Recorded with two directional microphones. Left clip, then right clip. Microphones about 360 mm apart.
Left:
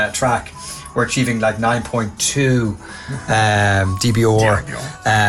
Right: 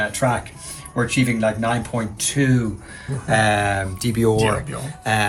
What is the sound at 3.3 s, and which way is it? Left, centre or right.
Speech, left.